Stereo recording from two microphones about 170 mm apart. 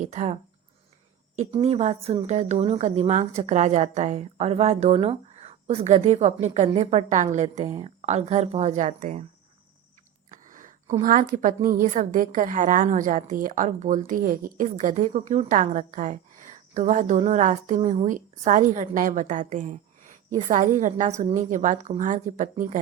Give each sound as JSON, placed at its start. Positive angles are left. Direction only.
{"t": 0.0, "sound": "a woman's voice", "side_deg": -40}
{"t": 1.6, "sound": "a woman's voice", "side_deg": -35}
{"t": 10.3, "sound": "a sound", "side_deg": -50}
{"t": 11.0, "sound": "a woman's voice", "side_deg": -50}